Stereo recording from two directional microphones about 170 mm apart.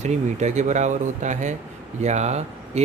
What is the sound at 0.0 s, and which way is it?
Speech, 45° right (ahead or behind).